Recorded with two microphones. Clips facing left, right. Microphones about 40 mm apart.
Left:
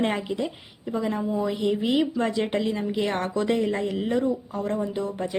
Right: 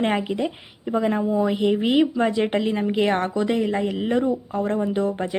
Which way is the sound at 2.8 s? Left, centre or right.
Right.